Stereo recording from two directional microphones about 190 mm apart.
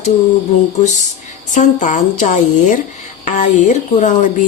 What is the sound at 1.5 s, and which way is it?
Speech, 40° left (ahead or behind).